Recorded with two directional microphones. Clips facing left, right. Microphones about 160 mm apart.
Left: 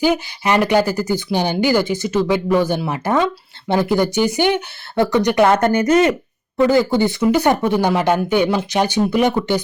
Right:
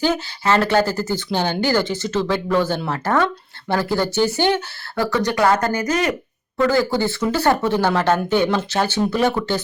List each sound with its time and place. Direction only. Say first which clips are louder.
0.0 s speech: left 3 dB; 15° left (ahead or behind)